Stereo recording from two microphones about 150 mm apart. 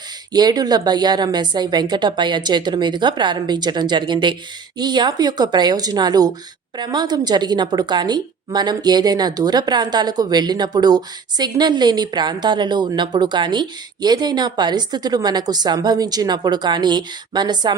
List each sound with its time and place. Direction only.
0.3 s a woman's voice: 25° right (ahead or behind)